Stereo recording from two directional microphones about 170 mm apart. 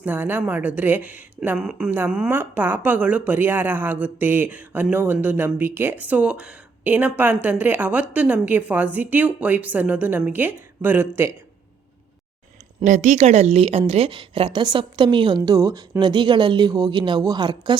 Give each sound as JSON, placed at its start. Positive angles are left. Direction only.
{"t": 0.0, "sound": "speech", "side_deg": -10}
{"t": 12.8, "sound": "a woman's voice", "side_deg": -45}